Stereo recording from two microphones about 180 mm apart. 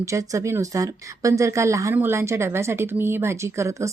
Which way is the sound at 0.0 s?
15° right (ahead or behind).